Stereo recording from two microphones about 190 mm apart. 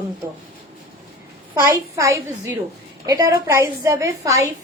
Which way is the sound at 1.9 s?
15° right (ahead or behind).